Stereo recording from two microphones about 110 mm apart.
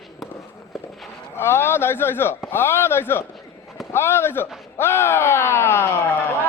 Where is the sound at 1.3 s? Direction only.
20° left (ahead or behind).